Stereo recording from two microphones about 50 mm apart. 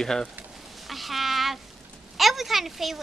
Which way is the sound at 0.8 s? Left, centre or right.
Centre.